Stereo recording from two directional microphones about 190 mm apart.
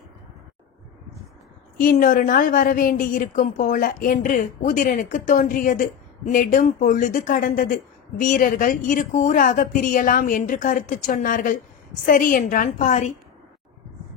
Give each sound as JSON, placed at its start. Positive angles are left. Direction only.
{"t": 1.8, "sound": "a woman's voice", "side_deg": 45}